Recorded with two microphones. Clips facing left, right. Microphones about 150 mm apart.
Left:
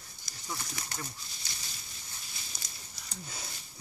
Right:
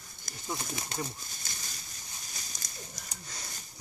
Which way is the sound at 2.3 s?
45° right (ahead or behind).